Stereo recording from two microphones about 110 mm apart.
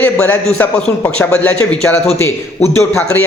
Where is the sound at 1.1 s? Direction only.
10° left (ahead or behind).